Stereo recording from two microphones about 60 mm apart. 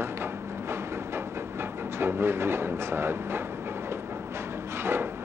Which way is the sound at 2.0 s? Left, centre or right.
Right.